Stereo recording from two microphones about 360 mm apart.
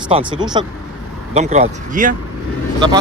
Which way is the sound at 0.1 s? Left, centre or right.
Centre.